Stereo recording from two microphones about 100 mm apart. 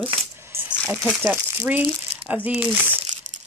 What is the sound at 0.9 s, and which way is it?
Speech, 10° right (ahead or behind).